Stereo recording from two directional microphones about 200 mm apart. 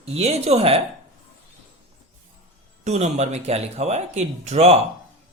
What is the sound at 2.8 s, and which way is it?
Speech, 35° right (ahead or behind).